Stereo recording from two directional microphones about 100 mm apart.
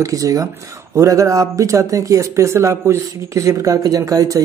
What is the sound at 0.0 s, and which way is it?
Speech, 35° right (ahead or behind).